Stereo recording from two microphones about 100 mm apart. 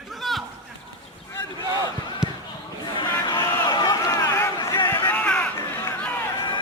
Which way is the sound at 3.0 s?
45° left (ahead or behind).